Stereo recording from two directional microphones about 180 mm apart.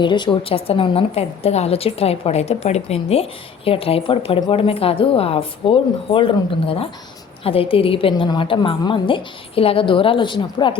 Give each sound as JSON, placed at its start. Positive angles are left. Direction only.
{"t": 0.0, "sound": "a woman's voice", "side_deg": 25}